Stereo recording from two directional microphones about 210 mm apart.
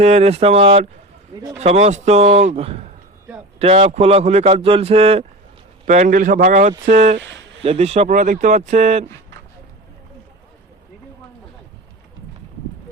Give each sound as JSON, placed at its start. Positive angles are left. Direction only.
{"t": 0.0, "sound": "speech", "side_deg": -30}